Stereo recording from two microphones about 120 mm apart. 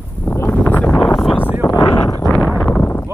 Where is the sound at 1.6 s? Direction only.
30° left (ahead or behind); by 2.8 s 15° left (ahead or behind).